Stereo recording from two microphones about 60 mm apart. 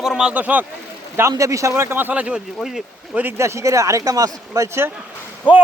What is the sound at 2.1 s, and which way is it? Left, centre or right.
Speech, centre.